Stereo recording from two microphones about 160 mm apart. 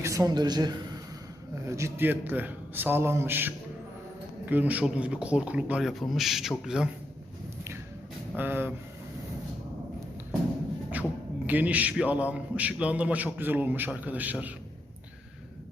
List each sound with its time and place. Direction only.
0.0 s a man's voice: 20° right (ahead or behind)
8.4 s a man's voice: 10° right (ahead or behind)
11.4 s a man's voice: 10° right (ahead or behind)